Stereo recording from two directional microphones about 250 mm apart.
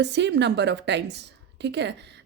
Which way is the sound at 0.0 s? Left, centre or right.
Right.